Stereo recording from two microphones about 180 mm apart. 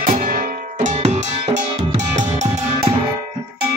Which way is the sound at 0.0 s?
50° right (ahead or behind).